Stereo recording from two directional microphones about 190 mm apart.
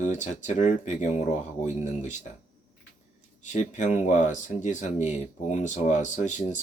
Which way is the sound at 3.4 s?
40° left (ahead or behind).